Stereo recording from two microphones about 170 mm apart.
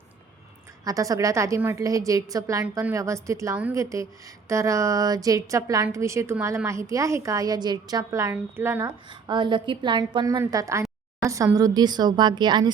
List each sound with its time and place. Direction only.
0.9 s a woman's voice: 20° right (ahead or behind)
9.0 s a woman's voice: 25° right (ahead or behind)